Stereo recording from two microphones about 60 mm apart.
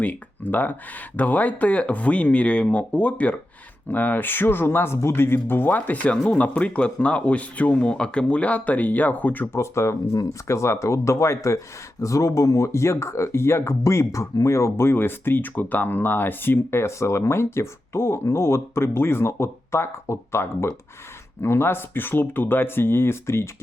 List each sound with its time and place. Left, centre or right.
0.0 s speech: left
9.6 s speech: left
13.8 s speech: left